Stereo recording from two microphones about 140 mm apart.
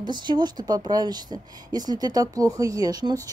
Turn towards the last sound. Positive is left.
turn(degrees=-25)  # may be behind; listen again after turning